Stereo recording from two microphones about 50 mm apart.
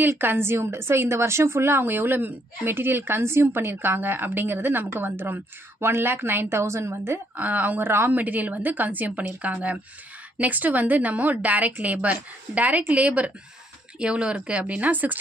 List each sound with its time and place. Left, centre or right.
0.2 s speech: right
0.5 s speech: right
6.5 s a woman's voice: right
7.3 s a woman's voice: right
7.8 s speech: right
8.1 s a woman's voice: right